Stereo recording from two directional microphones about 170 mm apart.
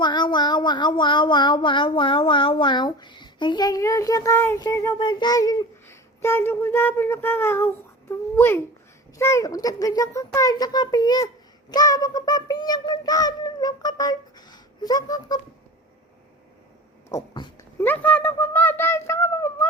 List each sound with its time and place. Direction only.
0.0 s speech: 25° left (ahead or behind)
17.1 s speech: 20° left (ahead or behind)
17.7 s a child's voice: 10° left (ahead or behind)